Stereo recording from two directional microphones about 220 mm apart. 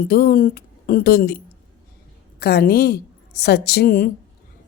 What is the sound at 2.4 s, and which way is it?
A woman's voice, 45° left (ahead or behind).